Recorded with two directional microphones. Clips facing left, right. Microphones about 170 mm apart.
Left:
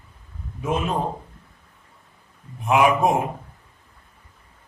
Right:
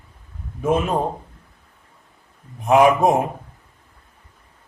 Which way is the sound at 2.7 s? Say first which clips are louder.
Right 4 dB; 35° right (ahead or behind).